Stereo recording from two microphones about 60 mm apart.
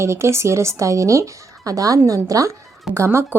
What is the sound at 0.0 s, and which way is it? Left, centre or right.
Speech, right.